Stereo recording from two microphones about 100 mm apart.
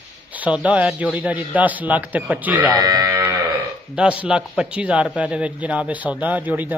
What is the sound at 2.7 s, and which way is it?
Sheep, 35° right (ahead or behind).